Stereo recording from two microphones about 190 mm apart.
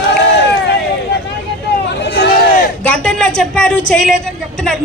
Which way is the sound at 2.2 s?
50° left (ahead or behind).